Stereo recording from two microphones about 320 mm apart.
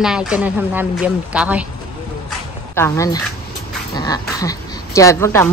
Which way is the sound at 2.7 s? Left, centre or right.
Centre.